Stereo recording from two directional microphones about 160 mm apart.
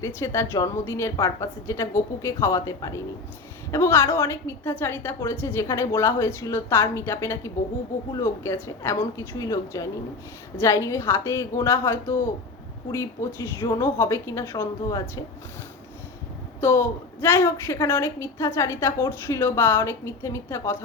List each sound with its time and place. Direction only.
0.0 s a woman's voice: 15° left (ahead or behind)
16.6 s a woman's voice: 15° left (ahead or behind)